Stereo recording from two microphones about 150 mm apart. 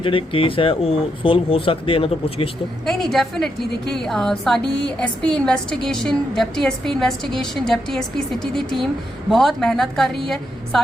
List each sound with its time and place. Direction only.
0.0 s speech: 35° left (ahead or behind)
2.8 s a woman's voice: centre (ahead or behind)